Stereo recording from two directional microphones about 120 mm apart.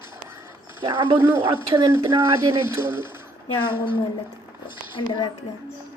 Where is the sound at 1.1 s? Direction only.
15° right (ahead or behind).